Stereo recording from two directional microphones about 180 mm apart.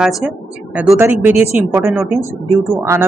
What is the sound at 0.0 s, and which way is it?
A woman's voice, centre (ahead or behind).